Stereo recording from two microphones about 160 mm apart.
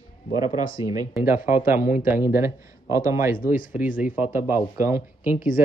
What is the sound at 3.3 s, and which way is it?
Speech, 60° left (ahead or behind).